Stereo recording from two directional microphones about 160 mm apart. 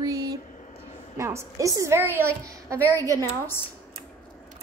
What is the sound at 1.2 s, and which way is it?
A woman's voice, 20° right (ahead or behind).